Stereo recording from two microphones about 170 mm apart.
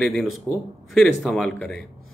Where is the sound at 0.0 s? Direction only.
Centre (ahead or behind).